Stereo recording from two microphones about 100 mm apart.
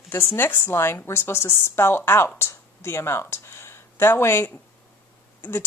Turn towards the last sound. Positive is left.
turn(degrees=20)  # may be behind; listen again after turning